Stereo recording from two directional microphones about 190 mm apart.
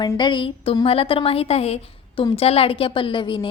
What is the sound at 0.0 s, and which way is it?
A woman's voice, 20° left (ahead or behind).